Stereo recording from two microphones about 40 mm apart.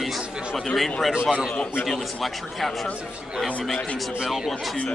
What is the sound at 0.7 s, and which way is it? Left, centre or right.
Speech, centre.